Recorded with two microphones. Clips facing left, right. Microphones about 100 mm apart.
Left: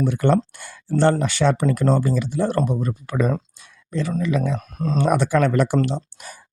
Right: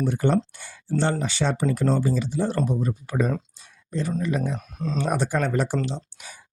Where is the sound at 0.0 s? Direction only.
60° left (ahead or behind).